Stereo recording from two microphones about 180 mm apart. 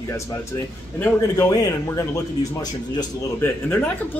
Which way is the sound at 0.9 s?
15° left (ahead or behind).